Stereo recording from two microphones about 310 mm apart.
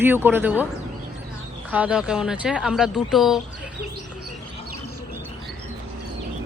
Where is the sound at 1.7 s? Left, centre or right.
Centre.